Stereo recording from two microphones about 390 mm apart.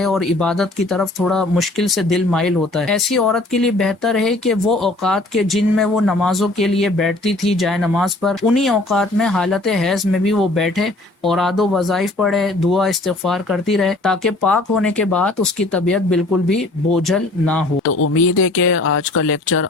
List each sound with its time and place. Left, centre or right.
0.0 s speech: centre
18.0 s speech: left